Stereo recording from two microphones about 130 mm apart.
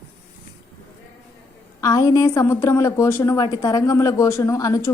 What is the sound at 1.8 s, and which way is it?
A woman's voice, 25° left (ahead or behind).